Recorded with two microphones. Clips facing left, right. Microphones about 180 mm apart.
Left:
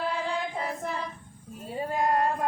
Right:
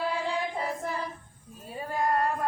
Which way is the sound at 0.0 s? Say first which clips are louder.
Even; 5° right (ahead or behind).